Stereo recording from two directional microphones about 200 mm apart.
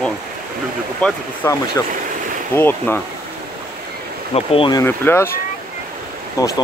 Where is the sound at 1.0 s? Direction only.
15° left (ahead or behind).